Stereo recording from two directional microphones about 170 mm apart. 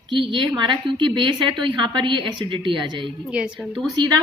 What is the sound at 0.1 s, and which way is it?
A woman's voice, 30° right (ahead or behind).